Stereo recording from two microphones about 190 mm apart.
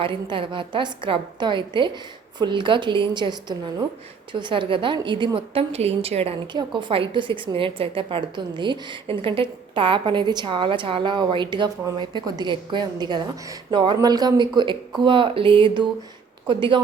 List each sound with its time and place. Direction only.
0.0 s a woman's voice: 25° right (ahead or behind)